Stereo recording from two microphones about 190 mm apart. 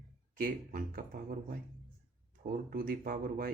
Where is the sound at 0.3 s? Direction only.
50° right (ahead or behind).